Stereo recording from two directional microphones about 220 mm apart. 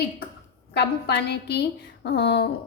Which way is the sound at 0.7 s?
50° left (ahead or behind).